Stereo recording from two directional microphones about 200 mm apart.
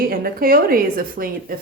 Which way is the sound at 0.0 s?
50° right (ahead or behind).